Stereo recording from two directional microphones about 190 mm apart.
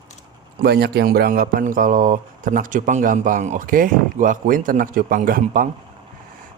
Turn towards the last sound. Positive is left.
turn(degrees=-45)  # may be behind; listen again after turning